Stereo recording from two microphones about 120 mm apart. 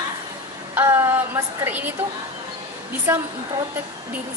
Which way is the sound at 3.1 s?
15° right (ahead or behind).